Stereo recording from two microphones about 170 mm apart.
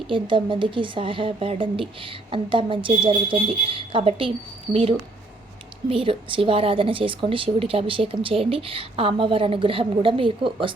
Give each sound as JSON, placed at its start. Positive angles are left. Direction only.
{"t": 0.1, "sound": "speech", "side_deg": -30}